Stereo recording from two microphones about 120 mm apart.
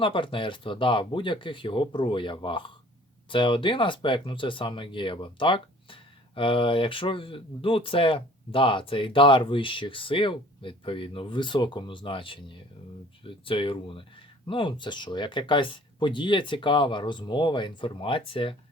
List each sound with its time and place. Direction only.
0.0 s speech: 45° left (ahead or behind)